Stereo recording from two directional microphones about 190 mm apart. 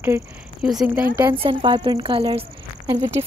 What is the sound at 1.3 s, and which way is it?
Speech, 25° right (ahead or behind).